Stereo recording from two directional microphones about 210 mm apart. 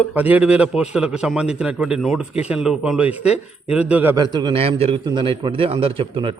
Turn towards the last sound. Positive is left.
turn(degrees=-25)  # may be behind; listen again after turning